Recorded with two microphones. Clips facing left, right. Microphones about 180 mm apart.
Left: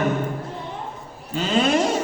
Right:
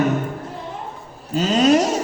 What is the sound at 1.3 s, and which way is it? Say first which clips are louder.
Speech: right 4 dB; 40° right (ahead or behind).